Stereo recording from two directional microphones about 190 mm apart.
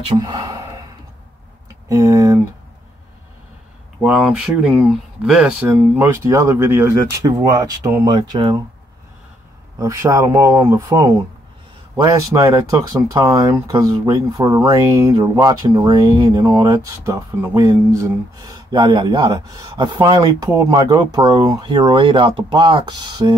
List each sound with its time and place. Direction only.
0.1 s sigh: 20° right (ahead or behind)
1.9 s speech: 15° right (ahead or behind)
4.0 s speech: 5° right (ahead or behind); by 8.6 s 25° right (ahead or behind)
9.8 s speech: 15° right (ahead or behind)